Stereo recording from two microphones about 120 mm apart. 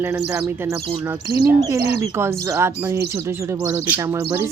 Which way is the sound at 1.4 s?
25° right (ahead or behind).